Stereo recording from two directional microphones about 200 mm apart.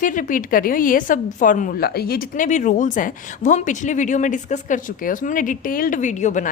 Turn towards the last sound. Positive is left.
turn(degrees=35)  # may be behind; listen again after turning